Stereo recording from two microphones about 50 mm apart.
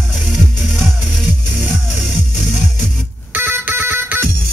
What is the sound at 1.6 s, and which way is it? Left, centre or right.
Music, right.